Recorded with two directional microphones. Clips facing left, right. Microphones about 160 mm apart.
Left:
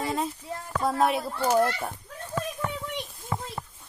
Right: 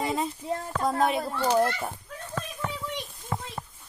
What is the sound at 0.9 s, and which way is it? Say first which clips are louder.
Speech: left 1 dB; centre (ahead or behind).